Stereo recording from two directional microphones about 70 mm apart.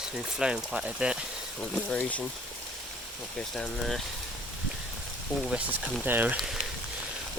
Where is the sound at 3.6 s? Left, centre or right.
Centre.